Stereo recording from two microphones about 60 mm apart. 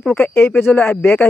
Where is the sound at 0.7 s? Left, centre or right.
Left.